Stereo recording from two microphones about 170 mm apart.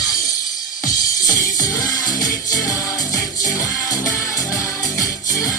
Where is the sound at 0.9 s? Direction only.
20° left (ahead or behind).